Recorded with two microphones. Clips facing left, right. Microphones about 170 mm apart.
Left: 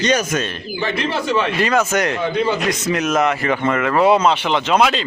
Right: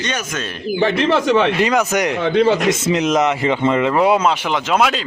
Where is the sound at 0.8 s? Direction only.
70° right (ahead or behind).